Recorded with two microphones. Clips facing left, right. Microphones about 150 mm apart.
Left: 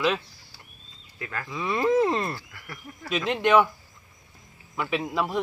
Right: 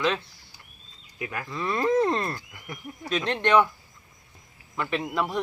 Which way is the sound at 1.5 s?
Centre (ahead or behind).